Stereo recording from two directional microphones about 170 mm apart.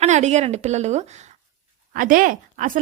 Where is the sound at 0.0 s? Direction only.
40° right (ahead or behind).